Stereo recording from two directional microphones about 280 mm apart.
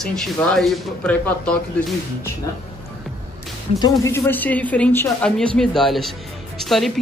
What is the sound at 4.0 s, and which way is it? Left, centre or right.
Speech, centre.